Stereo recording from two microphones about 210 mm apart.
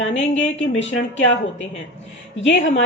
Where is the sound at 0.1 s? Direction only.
30° left (ahead or behind).